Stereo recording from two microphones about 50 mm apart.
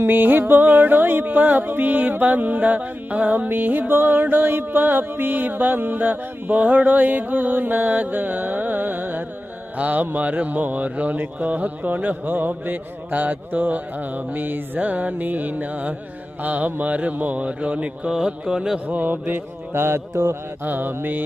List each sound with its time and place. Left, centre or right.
0.0 s speech: right
18.3 s music: centre
18.9 s speech: right
20.7 s speech: right